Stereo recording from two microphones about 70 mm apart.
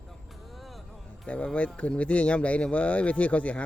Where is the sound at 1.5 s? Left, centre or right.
Centre.